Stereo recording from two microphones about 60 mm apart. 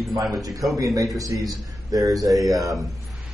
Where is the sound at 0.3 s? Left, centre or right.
Right.